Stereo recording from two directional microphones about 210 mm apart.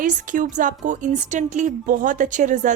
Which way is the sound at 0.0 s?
40° right (ahead or behind).